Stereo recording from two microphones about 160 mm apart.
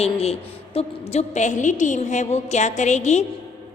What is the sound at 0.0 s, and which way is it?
A woman's voice, 40° left (ahead or behind).